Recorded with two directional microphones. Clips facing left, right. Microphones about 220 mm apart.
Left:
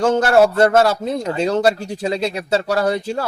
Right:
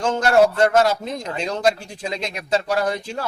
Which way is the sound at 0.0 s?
80° left.